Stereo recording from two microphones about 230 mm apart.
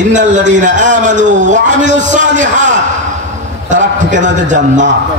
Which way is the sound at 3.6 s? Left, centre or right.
Right.